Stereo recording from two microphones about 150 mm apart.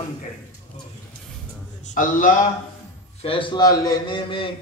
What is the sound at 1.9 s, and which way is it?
Speech, 60° left (ahead or behind).